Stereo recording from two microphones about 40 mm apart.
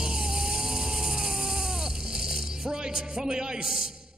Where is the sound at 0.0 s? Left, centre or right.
Centre.